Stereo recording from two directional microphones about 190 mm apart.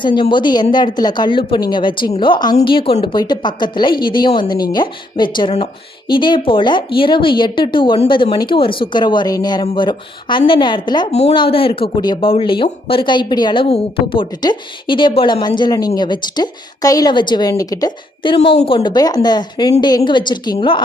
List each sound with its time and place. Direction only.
0.0 s speech: 25° left (ahead or behind)